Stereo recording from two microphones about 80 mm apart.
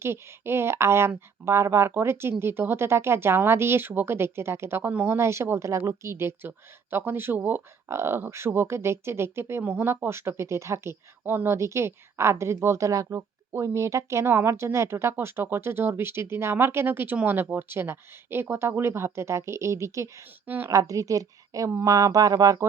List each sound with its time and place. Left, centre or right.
0.0 s speech: right
5.1 s a woman's voice: right